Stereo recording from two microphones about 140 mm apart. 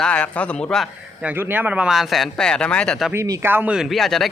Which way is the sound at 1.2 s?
15° right (ahead or behind).